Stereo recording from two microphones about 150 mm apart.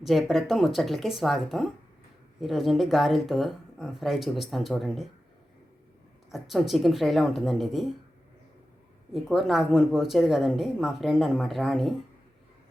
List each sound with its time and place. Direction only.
0.0 s speech: centre (ahead or behind)
6.3 s speech: centre (ahead or behind)
9.1 s speech: centre (ahead or behind)